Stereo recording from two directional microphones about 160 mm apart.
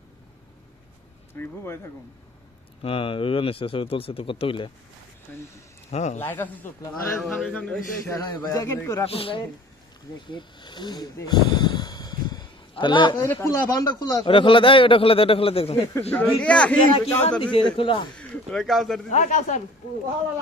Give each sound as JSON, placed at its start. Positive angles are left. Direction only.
{"t": 1.3, "sound": "speech", "side_deg": 15}
{"t": 2.8, "sound": "a man's voice", "side_deg": 35}
{"t": 5.3, "sound": "speech", "side_deg": 10}
{"t": 5.9, "sound": "speech", "side_deg": 45}
{"t": 6.1, "sound": "speech", "side_deg": 10}
{"t": 7.2, "sound": "speech", "side_deg": 0}
{"t": 8.1, "sound": "speech", "side_deg": 25}
{"t": 9.0, "sound": "a man's voice", "side_deg": 35}
{"t": 10.2, "sound": "snake", "side_deg": 30}
{"t": 13.1, "sound": "a man's voice", "side_deg": 15}
{"t": 15.9, "sound": "speech", "side_deg": 10}
{"t": 16.9, "sound": "a man's voice", "side_deg": 40}
{"t": 18.1, "sound": "speech", "side_deg": 5}
{"t": 19.0, "sound": "speech", "side_deg": 50}